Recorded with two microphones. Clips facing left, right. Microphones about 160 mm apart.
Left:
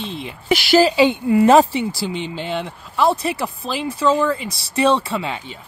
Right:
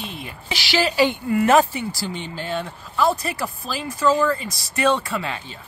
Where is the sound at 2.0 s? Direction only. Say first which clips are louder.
Left 4 dB; 15° left (ahead or behind).